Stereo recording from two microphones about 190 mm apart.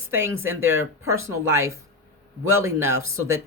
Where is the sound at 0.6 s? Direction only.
90° right.